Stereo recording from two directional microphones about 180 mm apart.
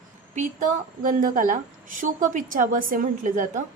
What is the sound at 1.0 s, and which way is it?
A woman's voice, 50° right (ahead or behind).